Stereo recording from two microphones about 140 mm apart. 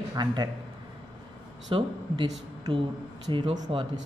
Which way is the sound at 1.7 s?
40° right (ahead or behind).